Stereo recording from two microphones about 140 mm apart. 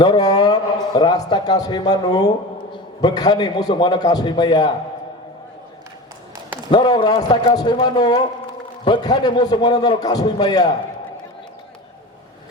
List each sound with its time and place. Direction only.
0.0 s a man's voice: 25° left (ahead or behind)
6.7 s a man's voice: 30° left (ahead or behind)